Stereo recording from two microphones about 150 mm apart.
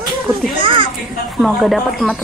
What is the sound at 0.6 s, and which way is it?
Speech, 35° right (ahead or behind).